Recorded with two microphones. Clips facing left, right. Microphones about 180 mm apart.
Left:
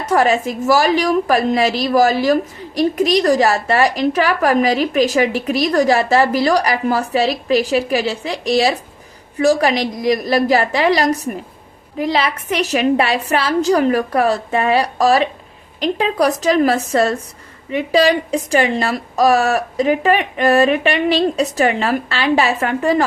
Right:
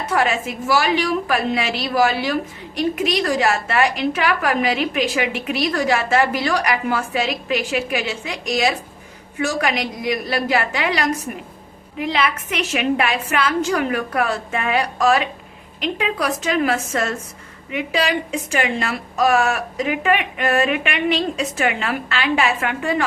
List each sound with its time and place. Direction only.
0.1 s a woman's voice: 40° left (ahead or behind)